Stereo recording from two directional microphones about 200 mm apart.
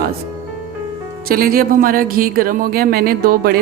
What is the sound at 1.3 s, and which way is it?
Speech, 50° right (ahead or behind).